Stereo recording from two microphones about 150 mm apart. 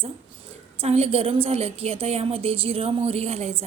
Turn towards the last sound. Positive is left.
turn(degrees=-45)  # may be behind; listen again after turning